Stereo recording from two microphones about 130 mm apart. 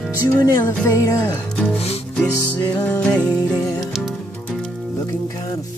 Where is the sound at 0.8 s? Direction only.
25° left (ahead or behind).